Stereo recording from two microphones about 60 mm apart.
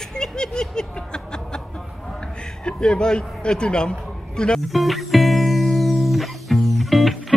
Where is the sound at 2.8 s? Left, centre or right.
Centre.